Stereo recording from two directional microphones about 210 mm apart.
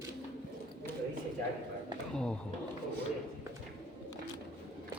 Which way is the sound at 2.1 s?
5° left (ahead or behind).